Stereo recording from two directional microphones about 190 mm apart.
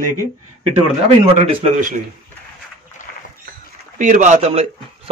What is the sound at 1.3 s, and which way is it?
Speech, 40° right (ahead or behind).